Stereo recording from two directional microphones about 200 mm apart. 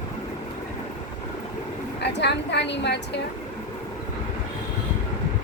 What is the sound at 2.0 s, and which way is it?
A woman's voice, 60° left (ahead or behind).